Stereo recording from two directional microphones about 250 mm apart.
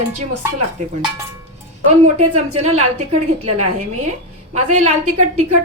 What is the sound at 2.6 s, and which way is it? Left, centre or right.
A woman's voice, right.